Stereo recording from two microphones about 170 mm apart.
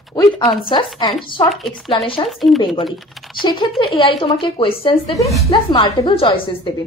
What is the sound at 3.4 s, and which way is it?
A woman's voice, 25° left (ahead or behind).